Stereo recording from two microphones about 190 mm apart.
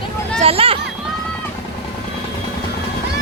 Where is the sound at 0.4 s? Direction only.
30° right (ahead or behind).